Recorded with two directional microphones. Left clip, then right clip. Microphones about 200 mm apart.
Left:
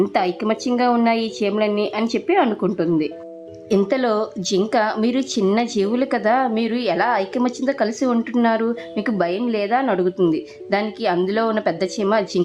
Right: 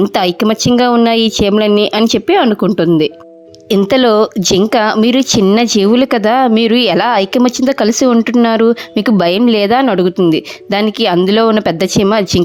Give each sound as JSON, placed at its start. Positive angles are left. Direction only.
{"t": 0.0, "sound": "speech", "side_deg": -45}